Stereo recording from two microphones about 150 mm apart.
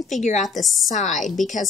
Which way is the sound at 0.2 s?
50° left (ahead or behind).